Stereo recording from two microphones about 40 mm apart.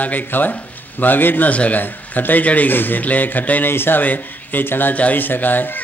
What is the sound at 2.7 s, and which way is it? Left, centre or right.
Speech, left.